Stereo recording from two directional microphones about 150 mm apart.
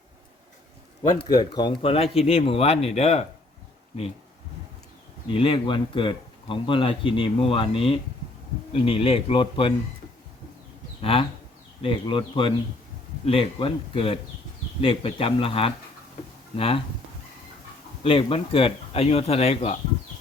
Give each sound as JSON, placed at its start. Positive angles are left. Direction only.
{"t": 1.3, "sound": "speech", "side_deg": 30}
{"t": 5.3, "sound": "speech", "side_deg": 35}
{"t": 11.0, "sound": "speech", "side_deg": 40}
{"t": 18.0, "sound": "speech", "side_deg": 35}